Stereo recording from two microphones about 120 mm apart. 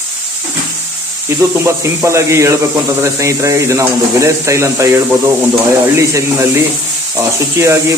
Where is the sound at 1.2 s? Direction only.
25° right (ahead or behind).